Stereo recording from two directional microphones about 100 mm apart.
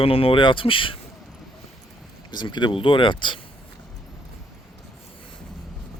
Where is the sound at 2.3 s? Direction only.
50° left (ahead or behind).